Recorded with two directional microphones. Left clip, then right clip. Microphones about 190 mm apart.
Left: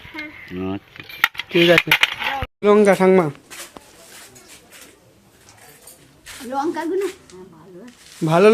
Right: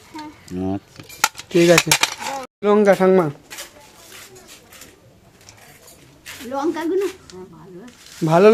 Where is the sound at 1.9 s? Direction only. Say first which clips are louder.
Left 2 dB; 10° left (ahead or behind).